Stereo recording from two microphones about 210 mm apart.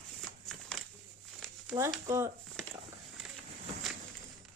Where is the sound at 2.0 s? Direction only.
15° right (ahead or behind).